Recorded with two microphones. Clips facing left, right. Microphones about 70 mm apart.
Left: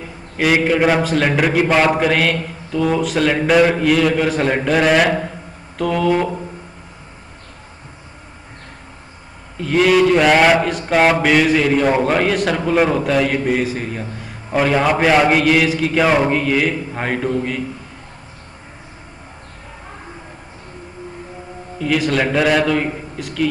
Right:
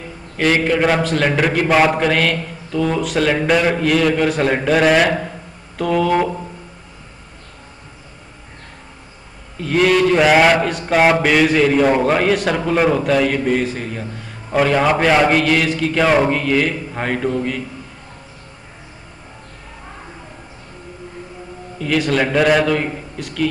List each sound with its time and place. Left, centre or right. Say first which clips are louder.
0.4 s mantra: left 1 dB; centre
9.6 s mantra: left 1 dB; centre
21.7 s mantra: even; centre